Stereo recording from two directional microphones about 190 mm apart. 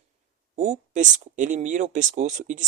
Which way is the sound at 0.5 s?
40° right (ahead or behind).